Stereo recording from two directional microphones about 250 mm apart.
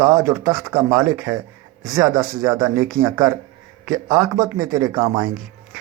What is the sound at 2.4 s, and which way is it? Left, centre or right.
Speech, centre.